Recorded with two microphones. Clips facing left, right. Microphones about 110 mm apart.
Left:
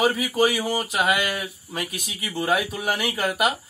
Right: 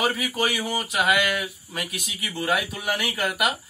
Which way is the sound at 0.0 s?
35° left (ahead or behind).